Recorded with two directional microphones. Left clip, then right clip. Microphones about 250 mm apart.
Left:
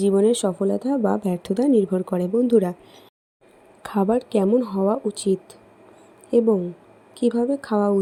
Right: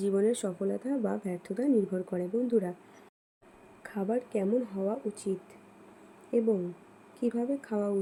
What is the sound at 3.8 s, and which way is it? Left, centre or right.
Speech, left.